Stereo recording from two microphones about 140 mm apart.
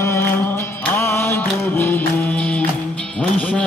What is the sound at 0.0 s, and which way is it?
Music, 20° left (ahead or behind).